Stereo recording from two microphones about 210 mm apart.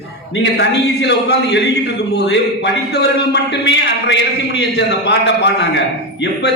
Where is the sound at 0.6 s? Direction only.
55° left (ahead or behind).